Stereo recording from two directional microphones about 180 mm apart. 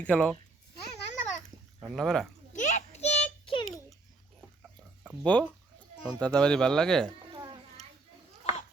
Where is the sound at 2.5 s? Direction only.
40° left (ahead or behind).